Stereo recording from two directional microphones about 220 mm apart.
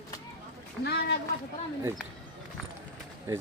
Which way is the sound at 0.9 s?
45° left (ahead or behind).